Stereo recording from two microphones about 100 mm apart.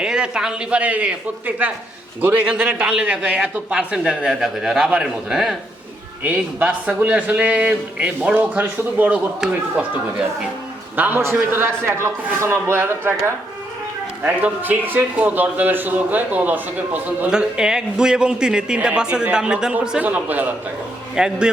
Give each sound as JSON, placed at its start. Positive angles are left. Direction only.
{"t": 0.0, "sound": "a man's voice", "side_deg": -10}
{"t": 10.9, "sound": "a man's voice", "side_deg": -20}
{"t": 14.3, "sound": "a man's voice", "side_deg": -15}